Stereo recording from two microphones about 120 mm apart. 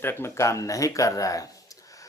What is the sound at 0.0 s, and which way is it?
Speech, 20° left (ahead or behind).